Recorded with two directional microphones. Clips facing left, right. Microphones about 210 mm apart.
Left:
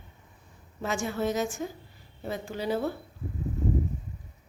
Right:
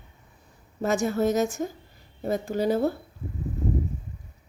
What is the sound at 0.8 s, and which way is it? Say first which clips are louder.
A woman's voice: right 6 dB; 40° right (ahead or behind).